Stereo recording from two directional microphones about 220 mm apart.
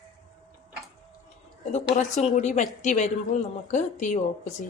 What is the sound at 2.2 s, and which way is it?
Speech, 30° left (ahead or behind).